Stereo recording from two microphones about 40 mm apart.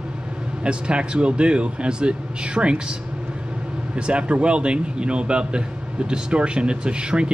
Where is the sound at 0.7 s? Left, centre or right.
Right.